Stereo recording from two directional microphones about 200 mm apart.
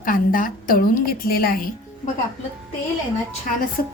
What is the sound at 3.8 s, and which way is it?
Speech, 45° left (ahead or behind).